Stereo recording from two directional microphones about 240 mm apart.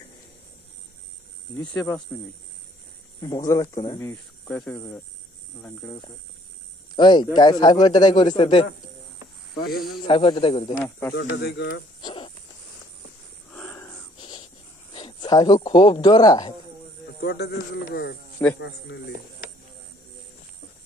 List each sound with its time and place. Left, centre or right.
1.6 s speech: centre
3.2 s speech: centre
7.0 s a man's voice: centre
9.7 s speech: centre
10.0 s a man's voice: left
10.8 s speech: centre
11.1 s a man's voice: left
12.0 s a sound: centre
13.5 s a sound: centre
14.1 s a sound: centre
17.2 s a man's voice: left